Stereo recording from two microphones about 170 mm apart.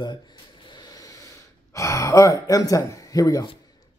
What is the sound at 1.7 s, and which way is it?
Speech, 20° left (ahead or behind).